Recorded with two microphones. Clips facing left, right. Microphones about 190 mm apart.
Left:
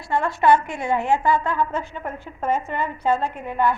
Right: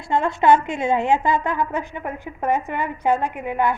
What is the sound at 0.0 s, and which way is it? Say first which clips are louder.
A woman's voice: right 1 dB; 20° right (ahead or behind).